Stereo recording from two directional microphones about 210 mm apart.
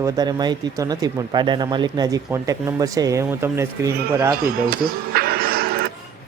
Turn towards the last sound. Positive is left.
turn(degrees=-45)  # may be behind; listen again after turning